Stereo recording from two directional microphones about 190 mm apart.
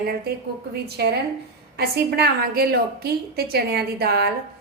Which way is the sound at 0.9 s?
60° right (ahead or behind).